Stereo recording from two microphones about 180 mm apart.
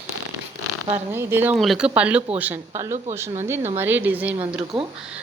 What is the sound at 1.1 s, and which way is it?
Speech, 10° right (ahead or behind).